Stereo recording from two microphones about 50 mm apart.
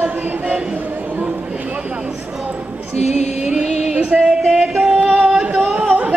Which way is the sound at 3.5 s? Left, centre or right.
Centre.